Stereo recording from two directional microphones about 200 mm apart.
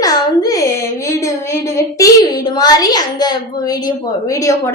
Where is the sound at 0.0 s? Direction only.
20° left (ahead or behind).